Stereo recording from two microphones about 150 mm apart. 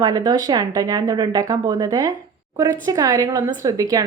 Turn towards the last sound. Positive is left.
turn(degrees=-20)  # may be behind; listen again after turning